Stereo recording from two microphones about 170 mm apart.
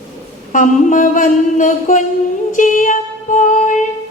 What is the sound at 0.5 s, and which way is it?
A woman's voice, 50° left (ahead or behind).